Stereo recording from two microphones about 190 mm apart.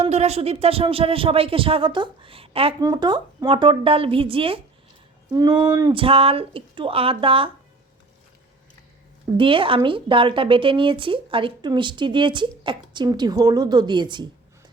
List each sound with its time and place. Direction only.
0.0 s a woman's voice: 35° right (ahead or behind)
9.4 s a woman's voice: 25° right (ahead or behind)